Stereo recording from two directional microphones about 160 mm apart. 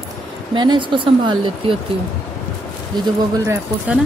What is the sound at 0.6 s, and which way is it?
Speech, 30° right (ahead or behind).